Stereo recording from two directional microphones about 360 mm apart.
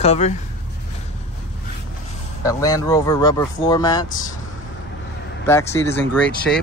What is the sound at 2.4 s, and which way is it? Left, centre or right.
Speech, centre.